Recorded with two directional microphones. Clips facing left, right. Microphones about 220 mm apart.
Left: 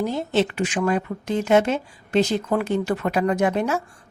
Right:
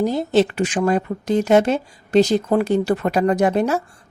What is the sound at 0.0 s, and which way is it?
Speech, 35° right (ahead or behind).